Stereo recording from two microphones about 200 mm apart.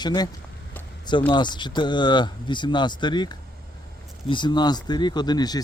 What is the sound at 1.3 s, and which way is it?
Speech, 20° left (ahead or behind).